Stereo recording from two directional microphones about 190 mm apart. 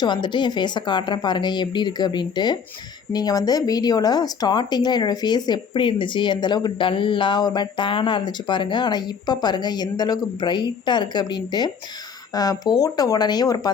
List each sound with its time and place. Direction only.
0.0 s speech: 25° left (ahead or behind)